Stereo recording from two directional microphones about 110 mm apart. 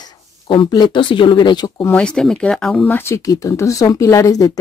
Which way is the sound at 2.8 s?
20° left (ahead or behind).